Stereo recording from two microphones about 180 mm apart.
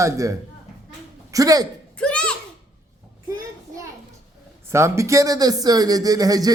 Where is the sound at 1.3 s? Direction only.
20° right (ahead or behind).